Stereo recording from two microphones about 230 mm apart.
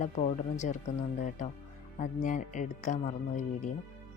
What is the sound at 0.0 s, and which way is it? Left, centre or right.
Speech, left.